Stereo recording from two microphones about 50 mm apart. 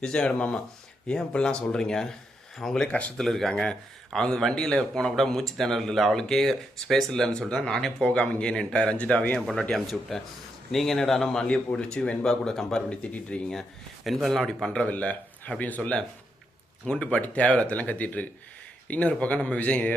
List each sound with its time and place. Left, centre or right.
0.0 s speech: centre
8.0 s speech: left
9.7 s speech: centre
13.0 s speech: left
13.5 s speech: centre
14.8 s speech: left
16.8 s speech: left